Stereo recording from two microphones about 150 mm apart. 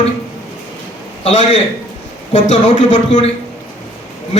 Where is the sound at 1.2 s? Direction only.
45° left (ahead or behind).